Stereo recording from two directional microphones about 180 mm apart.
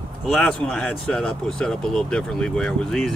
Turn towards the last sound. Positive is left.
turn(degrees=0)  # may be behind; listen again after turning